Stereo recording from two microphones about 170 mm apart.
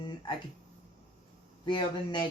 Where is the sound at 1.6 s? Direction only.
25° left (ahead or behind).